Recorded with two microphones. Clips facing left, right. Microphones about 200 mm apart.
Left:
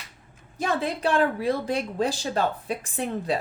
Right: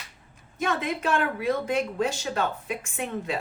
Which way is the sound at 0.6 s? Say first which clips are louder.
Left 2 dB; 35° left (ahead or behind).